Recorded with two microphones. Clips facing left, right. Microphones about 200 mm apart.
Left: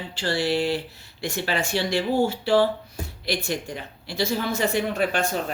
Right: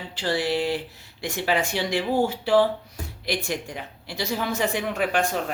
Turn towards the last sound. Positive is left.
turn(degrees=-15)  # may be behind; listen again after turning